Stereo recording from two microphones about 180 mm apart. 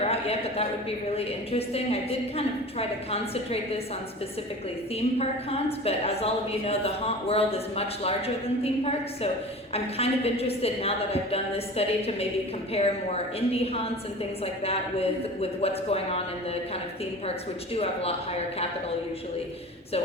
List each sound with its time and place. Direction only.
0.0 s a woman's voice: 35° left (ahead or behind)
5.5 s a woman's voice: 35° left (ahead or behind)